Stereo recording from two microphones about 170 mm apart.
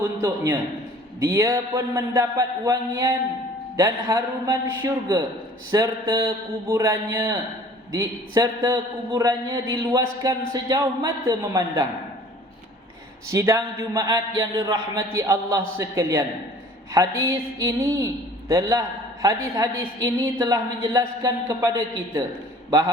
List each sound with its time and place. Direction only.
0.0 s a sound: 25° right (ahead or behind)
1.2 s a man's voice: 15° right (ahead or behind)
5.7 s a man's voice: 20° right (ahead or behind)
13.3 s a man's voice: 15° right (ahead or behind)